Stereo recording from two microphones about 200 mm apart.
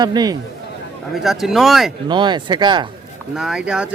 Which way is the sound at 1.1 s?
Centre (ahead or behind).